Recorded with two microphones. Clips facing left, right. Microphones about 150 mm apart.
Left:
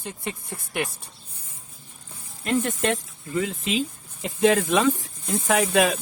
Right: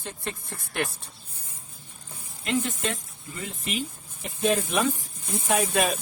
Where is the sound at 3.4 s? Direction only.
90° left.